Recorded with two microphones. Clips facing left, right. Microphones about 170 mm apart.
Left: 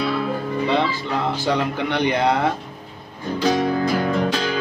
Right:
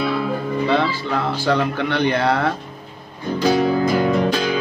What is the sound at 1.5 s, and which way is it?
Speech, 15° left (ahead or behind).